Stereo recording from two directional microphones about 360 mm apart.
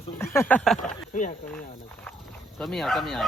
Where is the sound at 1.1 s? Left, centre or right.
Left.